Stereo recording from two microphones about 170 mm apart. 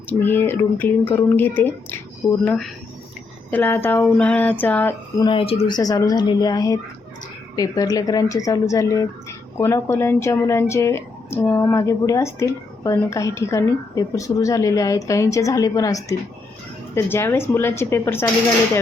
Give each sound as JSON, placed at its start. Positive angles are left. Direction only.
{"t": 0.1, "sound": "speech", "side_deg": 10}
{"t": 5.2, "sound": "speech", "side_deg": 30}